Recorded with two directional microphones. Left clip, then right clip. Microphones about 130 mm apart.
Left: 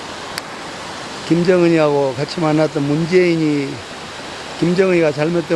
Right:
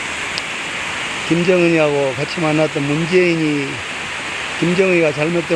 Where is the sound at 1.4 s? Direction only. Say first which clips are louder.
Left 1 dB; 25° left (ahead or behind).